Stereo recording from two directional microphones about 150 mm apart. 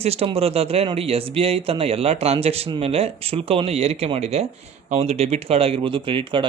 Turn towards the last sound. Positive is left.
turn(degrees=-35)  # may be behind; listen again after turning